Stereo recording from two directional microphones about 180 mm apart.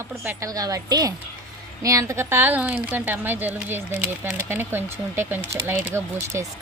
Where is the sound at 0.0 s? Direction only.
15° right (ahead or behind).